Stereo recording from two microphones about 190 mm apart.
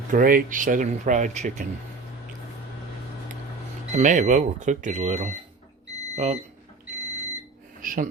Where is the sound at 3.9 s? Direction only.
40° right (ahead or behind).